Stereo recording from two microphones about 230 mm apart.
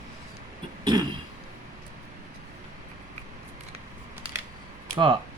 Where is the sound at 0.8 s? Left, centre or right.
Centre.